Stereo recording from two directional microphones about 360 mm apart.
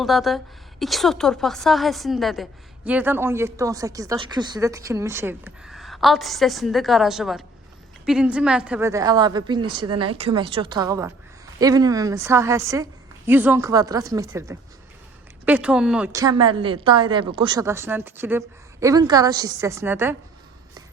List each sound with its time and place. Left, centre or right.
0.0 s a woman's voice: centre